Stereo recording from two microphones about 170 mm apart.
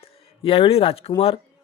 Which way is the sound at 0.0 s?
35° left (ahead or behind).